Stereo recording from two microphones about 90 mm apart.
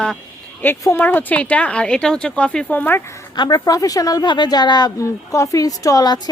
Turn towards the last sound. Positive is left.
turn(degrees=50)  # may be behind; listen again after turning